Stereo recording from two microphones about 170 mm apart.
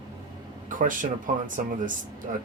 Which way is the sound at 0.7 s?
50° right (ahead or behind).